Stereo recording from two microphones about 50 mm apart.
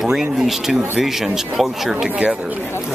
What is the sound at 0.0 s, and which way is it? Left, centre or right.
Speech, centre.